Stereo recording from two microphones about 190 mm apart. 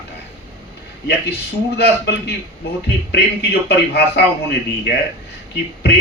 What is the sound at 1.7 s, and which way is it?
A man's voice, 60° left (ahead or behind).